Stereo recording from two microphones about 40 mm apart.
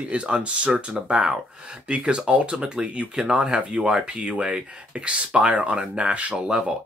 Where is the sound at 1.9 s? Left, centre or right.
Right.